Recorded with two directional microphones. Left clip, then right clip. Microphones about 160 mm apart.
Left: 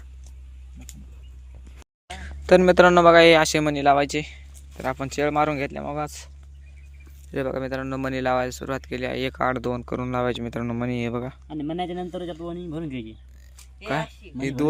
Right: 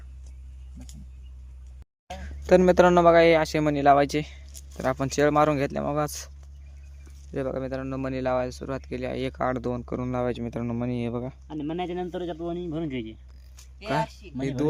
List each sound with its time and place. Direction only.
2.0 s speech: 5° right (ahead or behind)
3.7 s speech: 20° right (ahead or behind); by 6.3 s 35° right (ahead or behind)
7.3 s speech: 5° right (ahead or behind)
11.4 s speech: 80° left
12.1 s a man's voice: 55° left (ahead or behind)
12.5 s speech: 15° left (ahead or behind)
14.3 s speech: centre (ahead or behind)